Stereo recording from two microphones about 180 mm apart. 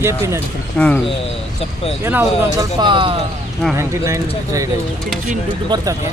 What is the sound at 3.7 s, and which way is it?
Speech, 15° right (ahead or behind).